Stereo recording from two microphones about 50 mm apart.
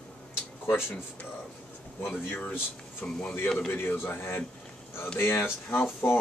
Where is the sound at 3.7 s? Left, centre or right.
Left.